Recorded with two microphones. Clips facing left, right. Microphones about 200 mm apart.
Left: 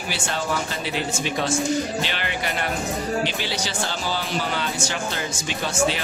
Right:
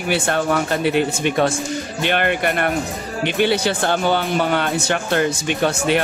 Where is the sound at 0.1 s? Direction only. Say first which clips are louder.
Right 8 dB; 60° right (ahead or behind).